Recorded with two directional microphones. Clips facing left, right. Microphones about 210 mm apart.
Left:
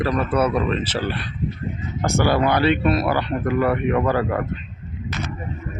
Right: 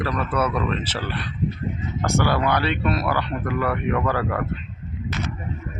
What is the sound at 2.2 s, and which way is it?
Speech, 25° left (ahead or behind).